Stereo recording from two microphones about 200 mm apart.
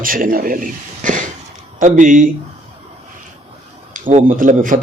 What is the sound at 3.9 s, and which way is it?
Speech, 40° right (ahead or behind).